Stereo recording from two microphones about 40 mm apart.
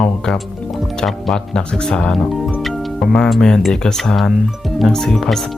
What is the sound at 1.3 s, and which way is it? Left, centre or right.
Speech, centre.